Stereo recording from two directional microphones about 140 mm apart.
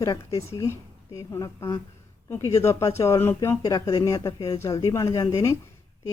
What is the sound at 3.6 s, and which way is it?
Speech, 25° left (ahead or behind).